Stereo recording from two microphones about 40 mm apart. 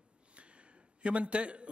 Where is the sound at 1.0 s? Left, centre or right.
Right.